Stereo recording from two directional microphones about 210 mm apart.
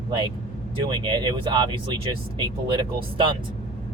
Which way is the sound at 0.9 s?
20° right (ahead or behind).